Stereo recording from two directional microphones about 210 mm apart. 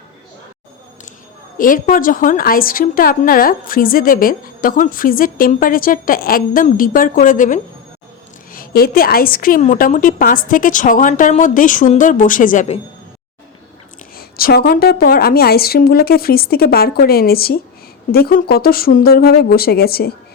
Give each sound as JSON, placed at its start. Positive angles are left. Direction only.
{"t": 1.5, "sound": "a woman's voice", "side_deg": 40}
{"t": 14.2, "sound": "a woman's voice", "side_deg": 45}